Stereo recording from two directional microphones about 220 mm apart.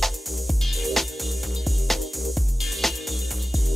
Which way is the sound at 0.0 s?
Centre (ahead or behind).